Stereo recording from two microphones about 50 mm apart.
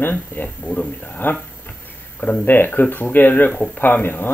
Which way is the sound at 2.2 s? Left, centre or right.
Left.